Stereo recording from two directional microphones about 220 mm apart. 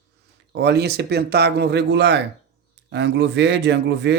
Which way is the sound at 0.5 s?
50° right (ahead or behind).